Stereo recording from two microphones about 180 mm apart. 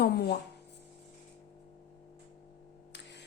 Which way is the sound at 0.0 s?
65° left (ahead or behind).